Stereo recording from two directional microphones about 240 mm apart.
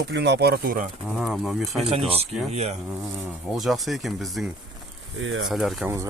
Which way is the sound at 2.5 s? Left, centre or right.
Right.